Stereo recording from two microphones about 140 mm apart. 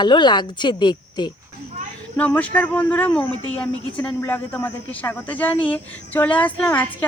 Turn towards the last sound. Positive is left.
turn(degrees=10)  # may be behind; listen again after turning